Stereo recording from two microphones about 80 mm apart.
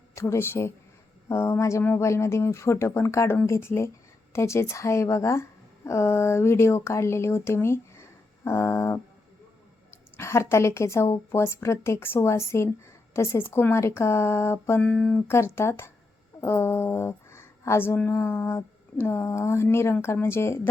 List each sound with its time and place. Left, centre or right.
0.1 s a woman's voice: left
1.8 s speech: left
2.0 s a woman's voice: left
10.2 s a woman's voice: left
14.8 s speech: centre
15.3 s a woman's voice: left